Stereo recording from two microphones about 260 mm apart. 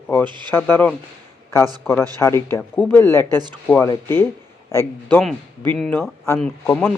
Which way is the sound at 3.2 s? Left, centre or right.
Centre.